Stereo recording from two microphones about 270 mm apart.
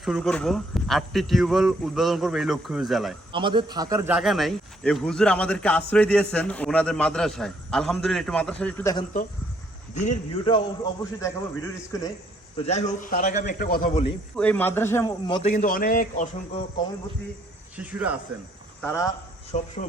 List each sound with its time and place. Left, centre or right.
0.0 s a man's voice: centre
3.3 s a man's voice: centre
9.9 s a man's voice: left; by 12.1 s centre
12.5 s a man's voice: left
14.3 s a man's voice: centre
15.4 s a man's voice: left
17.7 s a man's voice: centre
18.8 s a man's voice: centre
19.5 s a man's voice: left